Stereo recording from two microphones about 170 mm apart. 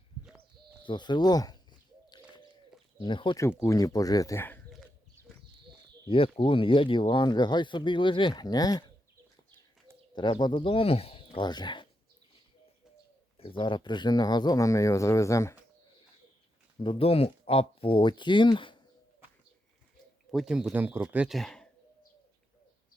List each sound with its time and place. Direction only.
0.9 s speech: 25° left (ahead or behind)
2.0 s bird: 25° left (ahead or behind)
3.0 s speech: 30° left (ahead or behind); by 4.6 s 10° left (ahead or behind)
6.1 s speech: 35° left (ahead or behind)
10.2 s speech: 25° left (ahead or behind)
13.3 s speech: 30° left (ahead or behind)
16.8 s speech: 30° left (ahead or behind)
20.3 s speech: 5° right (ahead or behind)